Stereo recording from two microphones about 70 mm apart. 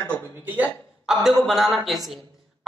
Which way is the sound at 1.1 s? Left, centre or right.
Centre.